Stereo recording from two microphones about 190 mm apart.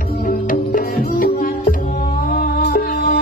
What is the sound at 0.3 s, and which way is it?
Music, 45° left (ahead or behind).